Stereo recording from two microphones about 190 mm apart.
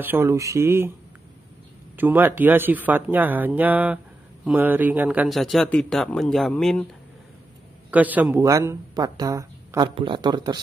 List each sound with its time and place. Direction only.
0.0 s speech: 15° right (ahead or behind)
2.0 s speech: 10° right (ahead or behind)
7.9 s speech: 10° right (ahead or behind)